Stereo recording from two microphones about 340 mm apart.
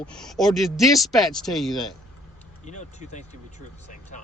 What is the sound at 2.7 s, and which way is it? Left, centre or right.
Speech, left.